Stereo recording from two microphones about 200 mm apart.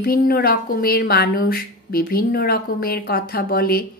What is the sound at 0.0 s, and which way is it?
A woman's voice, 50° left (ahead or behind).